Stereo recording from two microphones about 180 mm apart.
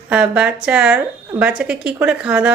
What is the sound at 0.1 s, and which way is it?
A woman's voice, 5° right (ahead or behind).